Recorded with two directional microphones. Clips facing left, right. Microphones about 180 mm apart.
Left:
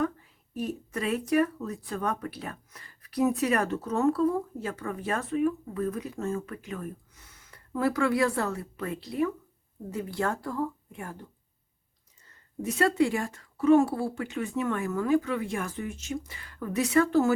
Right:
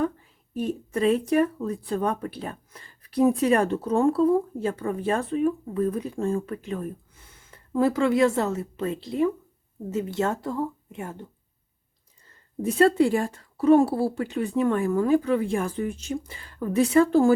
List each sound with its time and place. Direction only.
0.5 s speech: 25° right (ahead or behind)
12.6 s speech: 30° right (ahead or behind)